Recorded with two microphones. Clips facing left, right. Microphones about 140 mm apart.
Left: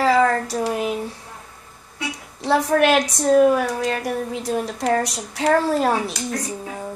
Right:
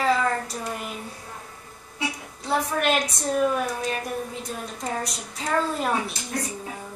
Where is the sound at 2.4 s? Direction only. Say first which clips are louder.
Left 7 dB; 90° left.